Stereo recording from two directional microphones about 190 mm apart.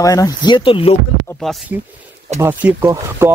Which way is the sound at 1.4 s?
Centre (ahead or behind).